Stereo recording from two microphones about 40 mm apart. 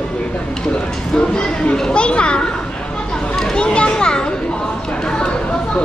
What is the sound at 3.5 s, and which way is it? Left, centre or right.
Children playing, left.